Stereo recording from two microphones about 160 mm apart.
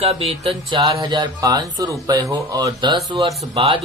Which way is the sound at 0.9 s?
25° right (ahead or behind).